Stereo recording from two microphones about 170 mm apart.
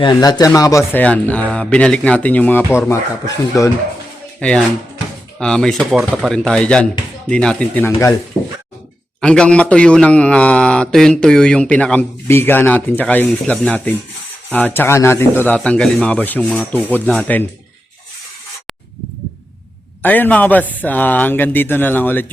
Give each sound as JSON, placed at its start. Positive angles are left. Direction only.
{"t": 0.0, "sound": "speech", "side_deg": 20}
{"t": 1.0, "sound": "a man's voice", "side_deg": 10}
{"t": 4.4, "sound": "a man's voice", "side_deg": 5}
{"t": 9.2, "sound": "a man's voice", "side_deg": 5}
{"t": 20.0, "sound": "a man's voice", "side_deg": 10}